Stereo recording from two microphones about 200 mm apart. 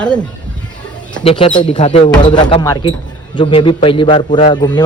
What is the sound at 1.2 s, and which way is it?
Speech, 30° left (ahead or behind).